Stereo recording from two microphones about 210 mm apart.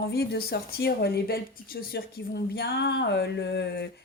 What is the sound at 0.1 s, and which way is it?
Speech, 50° left (ahead or behind).